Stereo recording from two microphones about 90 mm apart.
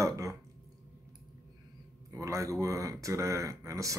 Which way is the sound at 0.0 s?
40° right (ahead or behind).